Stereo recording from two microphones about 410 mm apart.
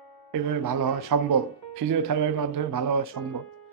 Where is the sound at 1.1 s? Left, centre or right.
Right.